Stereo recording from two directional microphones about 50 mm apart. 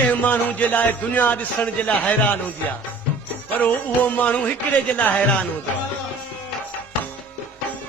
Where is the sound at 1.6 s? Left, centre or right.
Left.